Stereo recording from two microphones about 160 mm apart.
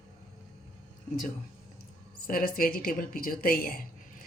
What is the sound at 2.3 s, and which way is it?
A woman's voice, 65° left (ahead or behind).